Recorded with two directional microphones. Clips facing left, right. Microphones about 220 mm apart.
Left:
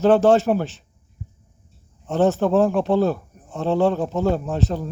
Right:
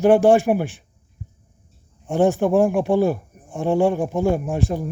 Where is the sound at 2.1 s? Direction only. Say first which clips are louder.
Right 1 dB; 15° right (ahead or behind).